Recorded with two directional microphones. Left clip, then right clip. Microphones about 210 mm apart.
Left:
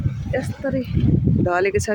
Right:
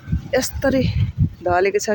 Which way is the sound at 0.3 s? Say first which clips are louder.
Right 6 dB; 55° right (ahead or behind).